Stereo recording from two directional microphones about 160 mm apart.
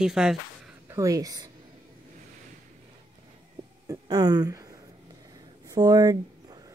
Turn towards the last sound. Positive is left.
turn(degrees=-25)  # may be behind; listen again after turning